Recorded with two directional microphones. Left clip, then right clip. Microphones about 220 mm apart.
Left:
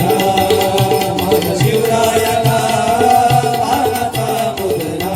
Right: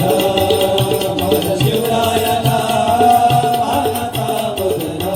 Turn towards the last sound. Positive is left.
turn(degrees=15)  # may be behind; listen again after turning